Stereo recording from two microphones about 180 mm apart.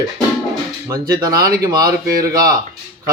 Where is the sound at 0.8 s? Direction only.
20° right (ahead or behind).